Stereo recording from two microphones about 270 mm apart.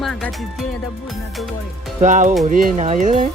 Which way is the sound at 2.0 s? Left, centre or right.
Right.